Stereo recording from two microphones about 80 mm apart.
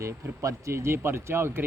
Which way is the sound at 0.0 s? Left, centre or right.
Right.